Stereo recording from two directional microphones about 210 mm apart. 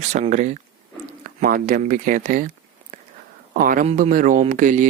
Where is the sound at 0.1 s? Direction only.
35° right (ahead or behind).